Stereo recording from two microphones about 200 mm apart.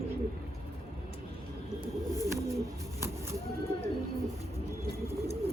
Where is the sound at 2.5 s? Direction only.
15° right (ahead or behind).